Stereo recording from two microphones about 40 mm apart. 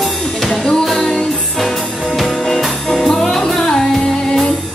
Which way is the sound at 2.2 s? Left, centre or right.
Centre.